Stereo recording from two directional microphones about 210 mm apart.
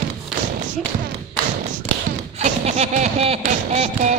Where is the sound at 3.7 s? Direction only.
30° right (ahead or behind).